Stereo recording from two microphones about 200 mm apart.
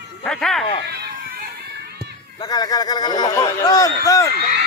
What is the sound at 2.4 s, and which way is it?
A man's voice, 20° left (ahead or behind).